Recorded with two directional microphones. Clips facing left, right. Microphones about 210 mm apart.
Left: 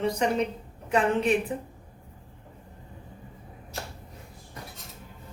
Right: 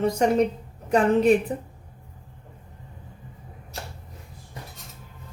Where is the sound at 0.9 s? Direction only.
40° right (ahead or behind).